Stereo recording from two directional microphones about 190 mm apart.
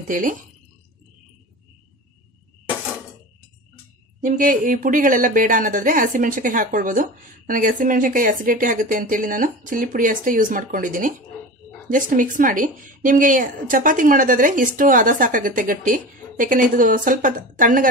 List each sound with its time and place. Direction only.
0.1 s speech: 45° right (ahead or behind)
4.2 s speech: 45° right (ahead or behind)